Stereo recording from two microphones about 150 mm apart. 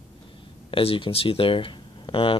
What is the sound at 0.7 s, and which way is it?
Speech, 40° left (ahead or behind).